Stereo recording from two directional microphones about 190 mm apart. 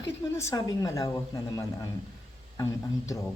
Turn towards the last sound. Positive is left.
turn(degrees=15)  # may be behind; listen again after turning